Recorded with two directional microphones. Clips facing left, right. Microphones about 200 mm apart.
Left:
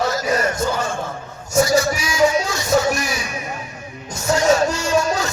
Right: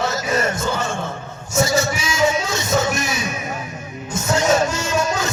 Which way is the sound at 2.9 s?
20° right (ahead or behind).